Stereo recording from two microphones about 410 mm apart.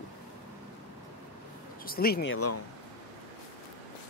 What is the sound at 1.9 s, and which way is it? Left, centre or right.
Speech, left.